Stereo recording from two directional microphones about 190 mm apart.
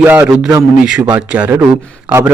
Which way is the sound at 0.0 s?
10° right (ahead or behind).